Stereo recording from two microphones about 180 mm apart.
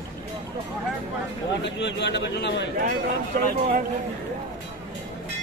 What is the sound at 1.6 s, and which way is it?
A man's voice, 80° left.